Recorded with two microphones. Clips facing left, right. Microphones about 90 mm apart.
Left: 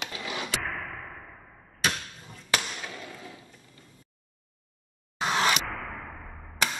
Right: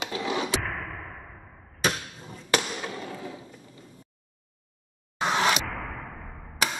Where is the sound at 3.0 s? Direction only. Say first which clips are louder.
Right 6 dB; 25° right (ahead or behind).